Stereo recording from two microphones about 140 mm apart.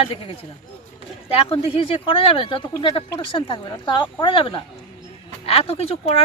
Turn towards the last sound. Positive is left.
turn(degrees=45)  # may be behind; listen again after turning